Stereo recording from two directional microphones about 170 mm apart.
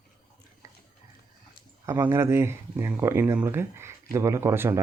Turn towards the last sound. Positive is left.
turn(degrees=-15)  # may be behind; listen again after turning